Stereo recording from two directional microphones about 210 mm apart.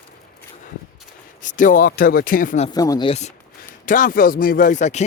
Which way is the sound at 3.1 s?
30° left (ahead or behind).